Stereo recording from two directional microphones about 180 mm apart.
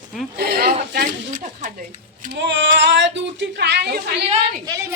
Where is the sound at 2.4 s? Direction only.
85° right; by 4.1 s 65° right (ahead or behind).